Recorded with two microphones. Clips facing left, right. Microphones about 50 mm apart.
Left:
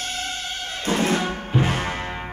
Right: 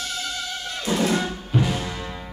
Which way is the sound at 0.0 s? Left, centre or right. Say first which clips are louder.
Left 1 dB; left.